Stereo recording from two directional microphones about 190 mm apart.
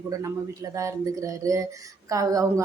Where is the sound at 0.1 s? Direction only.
15° right (ahead or behind).